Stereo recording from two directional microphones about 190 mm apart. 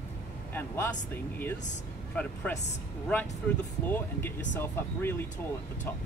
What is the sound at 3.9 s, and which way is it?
Speech, 10° left (ahead or behind).